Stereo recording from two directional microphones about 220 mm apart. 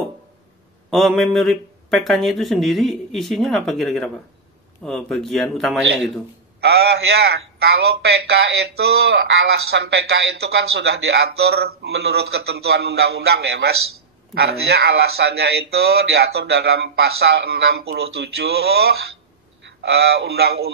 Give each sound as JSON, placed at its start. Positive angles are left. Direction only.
{"t": 0.8, "sound": "speech", "side_deg": 0}
{"t": 6.6, "sound": "a man's voice", "side_deg": -45}